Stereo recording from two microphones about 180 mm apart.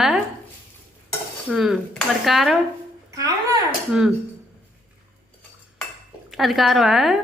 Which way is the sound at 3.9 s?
5° right (ahead or behind).